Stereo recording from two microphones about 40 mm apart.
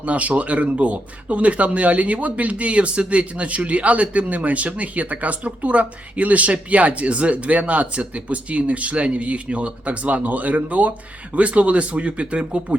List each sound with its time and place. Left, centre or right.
0.0 s speech: right